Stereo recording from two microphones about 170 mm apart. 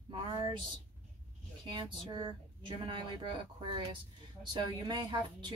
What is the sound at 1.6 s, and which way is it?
Speech, 30° right (ahead or behind).